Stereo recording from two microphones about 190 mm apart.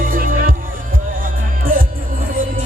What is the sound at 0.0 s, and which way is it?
Music, 45° right (ahead or behind).